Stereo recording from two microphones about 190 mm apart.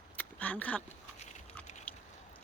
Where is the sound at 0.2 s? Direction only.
10° left (ahead or behind).